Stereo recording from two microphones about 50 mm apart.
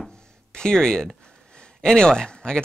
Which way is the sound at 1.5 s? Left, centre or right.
Centre.